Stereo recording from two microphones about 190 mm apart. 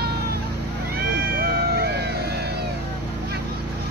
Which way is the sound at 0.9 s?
55° right (ahead or behind).